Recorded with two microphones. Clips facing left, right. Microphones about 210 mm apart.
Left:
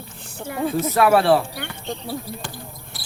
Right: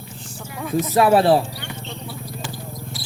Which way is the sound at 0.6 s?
30° left (ahead or behind).